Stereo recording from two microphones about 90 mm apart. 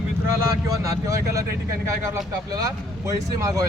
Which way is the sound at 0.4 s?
35° right (ahead or behind).